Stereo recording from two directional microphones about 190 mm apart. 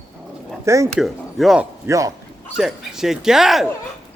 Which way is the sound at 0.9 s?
Centre (ahead or behind).